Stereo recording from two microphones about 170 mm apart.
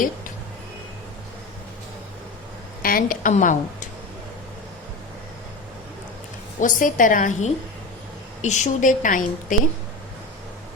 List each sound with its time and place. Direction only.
2.8 s a woman's voice: 55° left (ahead or behind)
6.6 s a woman's voice: 50° left (ahead or behind)